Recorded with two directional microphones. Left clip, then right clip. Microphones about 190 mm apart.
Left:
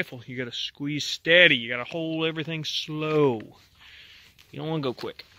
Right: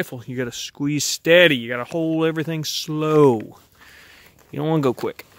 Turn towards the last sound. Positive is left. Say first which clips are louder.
# right 9 dB
turn(degrees=-50)  # may be behind; listen again after turning